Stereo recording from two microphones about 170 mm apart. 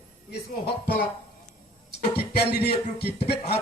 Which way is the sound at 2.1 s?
70° left (ahead or behind).